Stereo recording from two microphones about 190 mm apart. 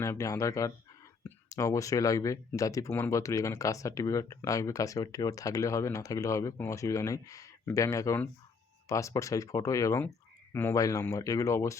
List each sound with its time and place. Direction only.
0.0 s speech: 15° left (ahead or behind)